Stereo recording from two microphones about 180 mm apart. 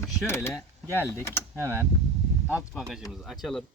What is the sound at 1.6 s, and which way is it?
Speech, 15° right (ahead or behind).